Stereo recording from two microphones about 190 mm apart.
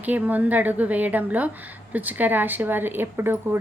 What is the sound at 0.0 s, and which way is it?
A woman's voice, 10° right (ahead or behind).